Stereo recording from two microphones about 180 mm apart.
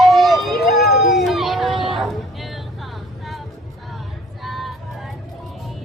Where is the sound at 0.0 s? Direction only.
Centre (ahead or behind).